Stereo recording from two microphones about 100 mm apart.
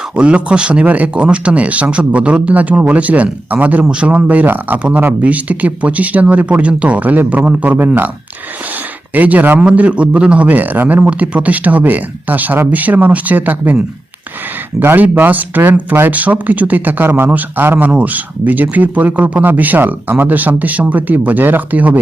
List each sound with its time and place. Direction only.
0.2 s speech: 10° right (ahead or behind)
9.1 s speech: 15° right (ahead or behind)